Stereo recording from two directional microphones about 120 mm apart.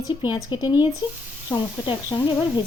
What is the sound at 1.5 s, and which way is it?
Speech, 15° left (ahead or behind).